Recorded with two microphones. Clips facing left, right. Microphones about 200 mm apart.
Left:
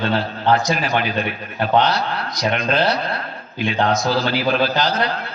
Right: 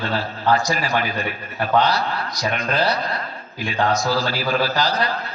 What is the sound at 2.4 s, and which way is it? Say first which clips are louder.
A man's voice: left 4 dB; 20° left (ahead or behind).